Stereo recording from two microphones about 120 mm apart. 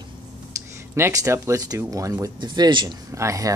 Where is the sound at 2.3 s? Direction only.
35° right (ahead or behind).